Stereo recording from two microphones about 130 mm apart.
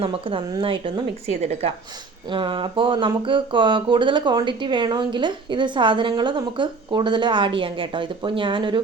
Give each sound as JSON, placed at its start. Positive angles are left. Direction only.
{"t": 0.0, "sound": "speech", "side_deg": -45}
{"t": 1.3, "sound": "a woman's voice", "side_deg": -55}
{"t": 2.3, "sound": "speech", "side_deg": -40}